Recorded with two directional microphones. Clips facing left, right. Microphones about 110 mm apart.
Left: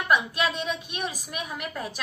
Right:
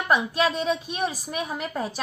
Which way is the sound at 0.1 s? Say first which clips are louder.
Right 2 dB; 35° right (ahead or behind).